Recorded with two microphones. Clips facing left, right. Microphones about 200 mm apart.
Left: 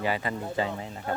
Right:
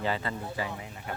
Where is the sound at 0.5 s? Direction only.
25° left (ahead or behind).